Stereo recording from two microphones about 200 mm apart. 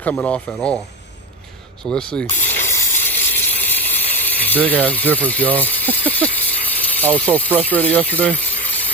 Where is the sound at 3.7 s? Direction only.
10° left (ahead or behind).